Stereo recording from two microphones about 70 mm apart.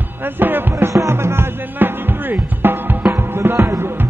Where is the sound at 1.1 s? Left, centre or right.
Right.